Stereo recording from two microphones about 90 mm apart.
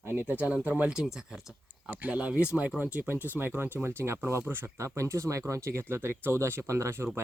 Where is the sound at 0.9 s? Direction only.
5° right (ahead or behind).